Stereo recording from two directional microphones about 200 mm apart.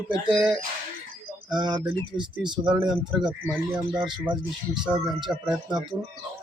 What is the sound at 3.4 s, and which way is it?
Speech, 10° right (ahead or behind).